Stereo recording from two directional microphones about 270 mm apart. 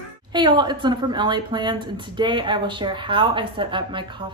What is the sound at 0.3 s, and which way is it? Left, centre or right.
A woman's voice, centre.